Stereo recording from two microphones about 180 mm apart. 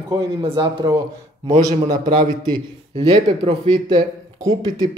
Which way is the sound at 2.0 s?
25° right (ahead or behind).